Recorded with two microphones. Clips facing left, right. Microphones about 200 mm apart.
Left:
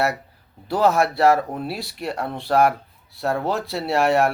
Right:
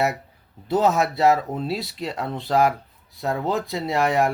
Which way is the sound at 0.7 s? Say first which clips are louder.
Left 1 dB; 20° right (ahead or behind).